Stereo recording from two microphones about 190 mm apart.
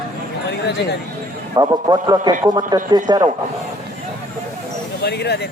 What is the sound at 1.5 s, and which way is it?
A man's voice, 20° right (ahead or behind).